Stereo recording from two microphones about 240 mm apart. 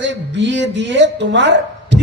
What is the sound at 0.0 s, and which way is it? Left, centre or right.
A man's voice, right.